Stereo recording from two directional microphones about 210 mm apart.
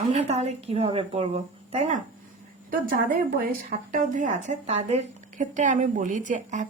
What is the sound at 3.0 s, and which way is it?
Speech, 40° right (ahead or behind).